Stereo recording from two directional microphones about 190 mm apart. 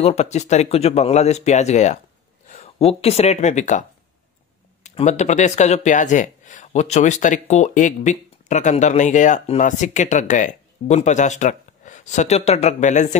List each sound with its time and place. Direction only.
0.0 s speech: 35° left (ahead or behind)
4.8 s speech: 35° left (ahead or behind)